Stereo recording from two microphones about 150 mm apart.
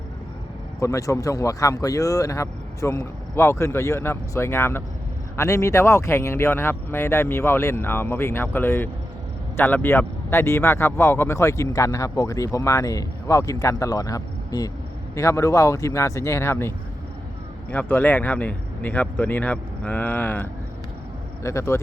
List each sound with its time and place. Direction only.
0.8 s speech: 20° left (ahead or behind)